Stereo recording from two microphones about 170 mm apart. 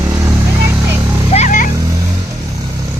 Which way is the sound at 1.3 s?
45° left (ahead or behind).